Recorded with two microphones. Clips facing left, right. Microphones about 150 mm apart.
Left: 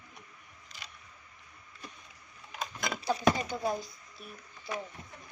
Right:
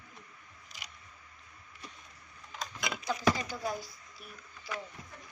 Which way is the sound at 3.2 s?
20° left (ahead or behind).